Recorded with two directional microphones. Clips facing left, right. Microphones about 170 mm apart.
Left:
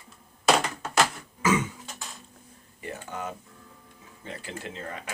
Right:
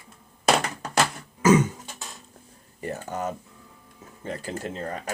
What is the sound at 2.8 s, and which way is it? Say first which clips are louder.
Speech: right 5 dB; 40° right (ahead or behind).